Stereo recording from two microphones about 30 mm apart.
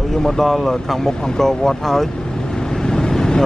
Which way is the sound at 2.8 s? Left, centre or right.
Left.